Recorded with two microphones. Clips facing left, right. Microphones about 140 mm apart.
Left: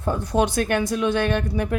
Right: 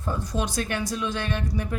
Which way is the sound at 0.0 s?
60° left (ahead or behind).